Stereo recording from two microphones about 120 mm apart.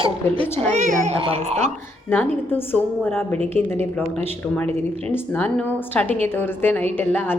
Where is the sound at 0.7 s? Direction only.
80° right.